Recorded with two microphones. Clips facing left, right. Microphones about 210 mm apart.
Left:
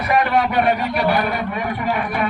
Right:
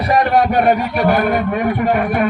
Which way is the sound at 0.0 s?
40° right (ahead or behind).